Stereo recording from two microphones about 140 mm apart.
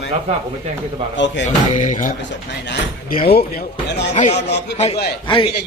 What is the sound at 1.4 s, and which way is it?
Music, 60° left (ahead or behind).